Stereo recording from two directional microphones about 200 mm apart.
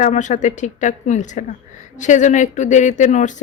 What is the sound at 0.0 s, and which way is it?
Speech, 40° left (ahead or behind).